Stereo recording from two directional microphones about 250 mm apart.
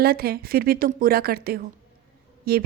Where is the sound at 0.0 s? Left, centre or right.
Right.